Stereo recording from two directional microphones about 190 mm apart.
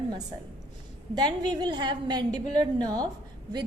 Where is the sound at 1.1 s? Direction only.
20° right (ahead or behind).